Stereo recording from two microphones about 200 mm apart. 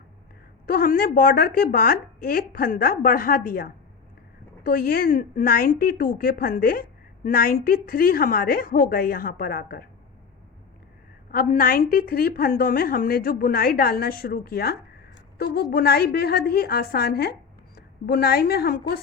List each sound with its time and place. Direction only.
0.6 s a woman's voice: 45° left (ahead or behind)
11.3 s a woman's voice: 45° left (ahead or behind)